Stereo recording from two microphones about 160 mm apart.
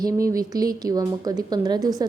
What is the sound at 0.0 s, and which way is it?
A woman's voice, 20° right (ahead or behind).